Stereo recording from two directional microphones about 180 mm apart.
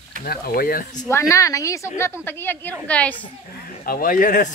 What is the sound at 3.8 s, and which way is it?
Speech, 50° left (ahead or behind).